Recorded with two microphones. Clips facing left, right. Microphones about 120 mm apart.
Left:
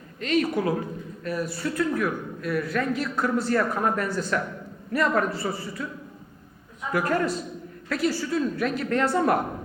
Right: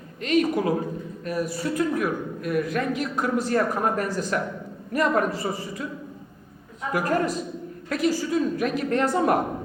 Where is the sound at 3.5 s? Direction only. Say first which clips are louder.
Right 1 dB; 40° right (ahead or behind).